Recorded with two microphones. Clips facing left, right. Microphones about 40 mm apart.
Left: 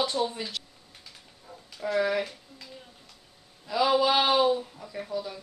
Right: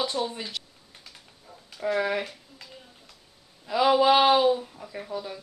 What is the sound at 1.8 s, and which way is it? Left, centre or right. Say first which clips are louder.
Speech: even; centre.